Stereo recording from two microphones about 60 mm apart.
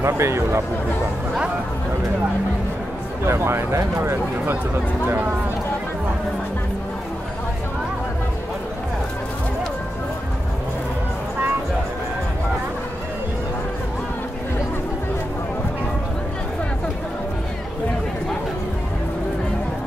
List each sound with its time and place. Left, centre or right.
0.0 s speech: right
3.3 s speech: right